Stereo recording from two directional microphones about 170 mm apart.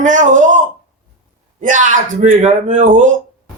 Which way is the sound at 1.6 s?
50° right (ahead or behind).